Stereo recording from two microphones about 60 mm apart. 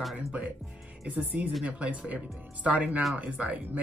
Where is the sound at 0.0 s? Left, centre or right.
Centre.